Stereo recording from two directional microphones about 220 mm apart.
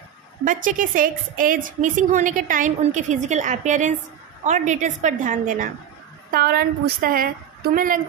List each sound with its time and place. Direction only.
0.5 s a woman's voice: 35° right (ahead or behind)